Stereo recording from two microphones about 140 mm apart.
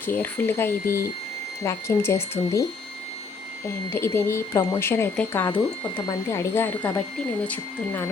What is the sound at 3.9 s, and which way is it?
Speech, 15° left (ahead or behind).